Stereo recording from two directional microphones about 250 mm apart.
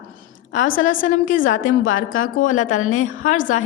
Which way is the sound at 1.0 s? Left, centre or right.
Left.